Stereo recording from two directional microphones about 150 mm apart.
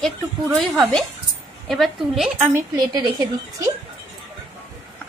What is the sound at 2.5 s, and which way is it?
Speech, 25° right (ahead or behind).